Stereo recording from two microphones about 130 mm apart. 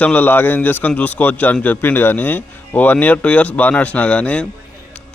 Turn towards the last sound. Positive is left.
turn(degrees=10)  # may be behind; listen again after turning